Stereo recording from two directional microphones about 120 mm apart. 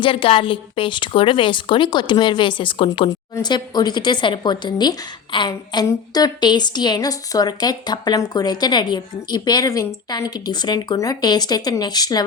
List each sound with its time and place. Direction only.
0.0 s a woman's voice: 45° left (ahead or behind)
3.1 s speech: 35° left (ahead or behind)